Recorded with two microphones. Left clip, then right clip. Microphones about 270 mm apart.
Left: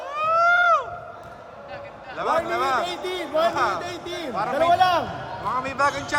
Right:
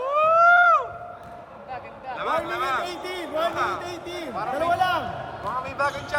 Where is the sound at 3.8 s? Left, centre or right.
Left.